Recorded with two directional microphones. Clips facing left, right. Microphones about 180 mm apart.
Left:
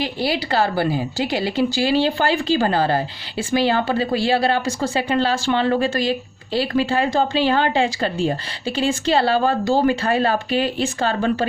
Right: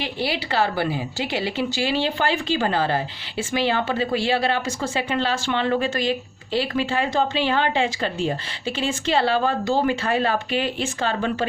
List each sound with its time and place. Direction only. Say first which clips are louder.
0.0 s speech: left 4 dB; 40° left (ahead or behind)